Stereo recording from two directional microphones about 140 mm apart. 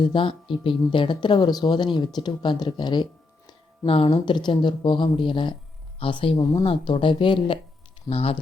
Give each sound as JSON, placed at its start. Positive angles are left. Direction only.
{"t": 0.0, "sound": "speech", "side_deg": 35}